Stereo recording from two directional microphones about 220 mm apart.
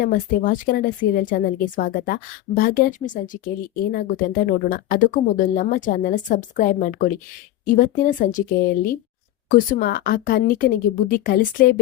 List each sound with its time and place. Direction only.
0.0 s speech: 40° left (ahead or behind)